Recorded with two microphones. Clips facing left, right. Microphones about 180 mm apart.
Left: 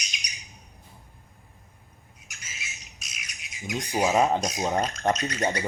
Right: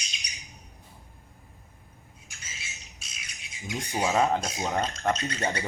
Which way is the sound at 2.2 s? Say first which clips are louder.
Left 2 dB; 30° right (ahead or behind).